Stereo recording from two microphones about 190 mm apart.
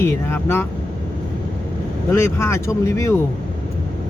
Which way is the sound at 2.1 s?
15° left (ahead or behind).